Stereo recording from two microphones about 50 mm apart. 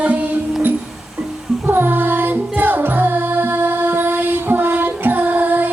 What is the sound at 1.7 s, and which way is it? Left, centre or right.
Music, right.